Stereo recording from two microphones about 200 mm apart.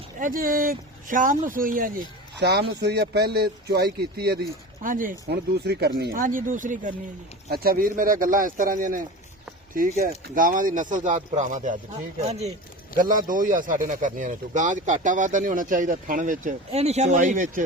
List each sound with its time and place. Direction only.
0.2 s speech: 45° right (ahead or behind)
2.4 s speech: 55° right (ahead or behind); by 12.5 s 30° right (ahead or behind)
13.0 s speech: 45° right (ahead or behind)